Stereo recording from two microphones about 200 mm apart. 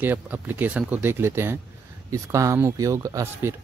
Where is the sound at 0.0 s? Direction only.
10° right (ahead or behind).